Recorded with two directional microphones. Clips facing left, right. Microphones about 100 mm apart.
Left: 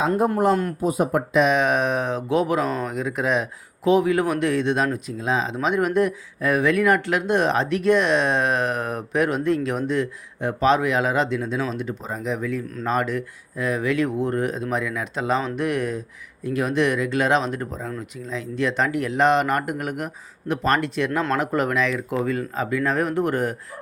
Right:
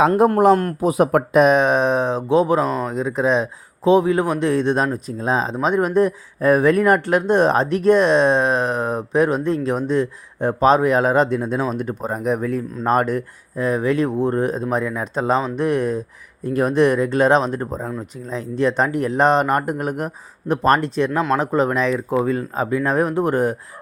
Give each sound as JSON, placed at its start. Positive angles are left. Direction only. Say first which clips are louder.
{"t": 0.0, "sound": "a man's voice", "louder": "right 6 dB", "side_deg": -70}
{"t": 1.3, "sound": "speech", "louder": "right 4 dB", "side_deg": -45}
{"t": 2.6, "sound": "speech", "louder": "right 3 dB", "side_deg": 0}
{"t": 2.9, "sound": "speech", "louder": "right 4 dB", "side_deg": -30}
{"t": 21.1, "sound": "speech", "louder": "right 3 dB", "side_deg": -15}
{"t": 21.3, "sound": "speech", "louder": "right 4 dB", "side_deg": -30}